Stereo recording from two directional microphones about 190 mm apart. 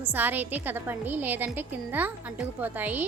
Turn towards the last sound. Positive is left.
turn(degrees=-10)  # may be behind; listen again after turning